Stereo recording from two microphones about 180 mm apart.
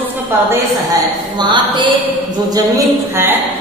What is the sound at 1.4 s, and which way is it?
Speech, 25° right (ahead or behind).